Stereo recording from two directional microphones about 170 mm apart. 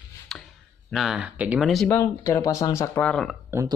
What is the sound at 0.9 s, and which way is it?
Speech, centre (ahead or behind).